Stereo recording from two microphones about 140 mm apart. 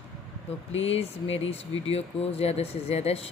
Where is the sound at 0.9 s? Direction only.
45° left (ahead or behind).